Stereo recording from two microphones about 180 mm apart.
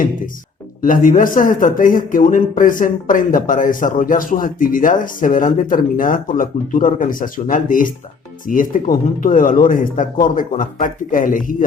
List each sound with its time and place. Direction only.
0.8 s a man's voice: 50° left (ahead or behind)